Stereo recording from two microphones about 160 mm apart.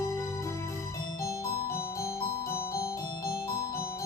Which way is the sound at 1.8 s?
20° left (ahead or behind).